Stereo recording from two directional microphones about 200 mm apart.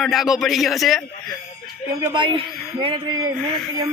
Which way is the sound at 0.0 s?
Centre (ahead or behind).